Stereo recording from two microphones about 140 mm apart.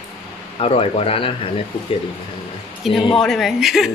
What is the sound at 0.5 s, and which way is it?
Speech, 45° left (ahead or behind).